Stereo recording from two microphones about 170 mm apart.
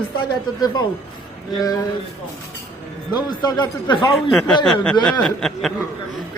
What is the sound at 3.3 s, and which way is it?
Speech, 25° left (ahead or behind).